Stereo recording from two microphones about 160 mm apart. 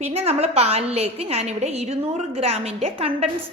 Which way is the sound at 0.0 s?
40° right (ahead or behind).